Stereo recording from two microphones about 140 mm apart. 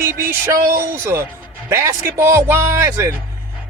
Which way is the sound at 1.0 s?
15° right (ahead or behind).